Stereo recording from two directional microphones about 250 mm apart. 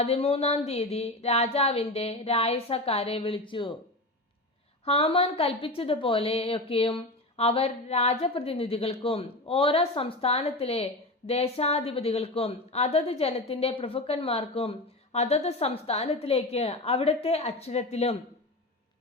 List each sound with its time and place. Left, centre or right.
0.0 s a woman's voice: left
4.9 s a woman's voice: left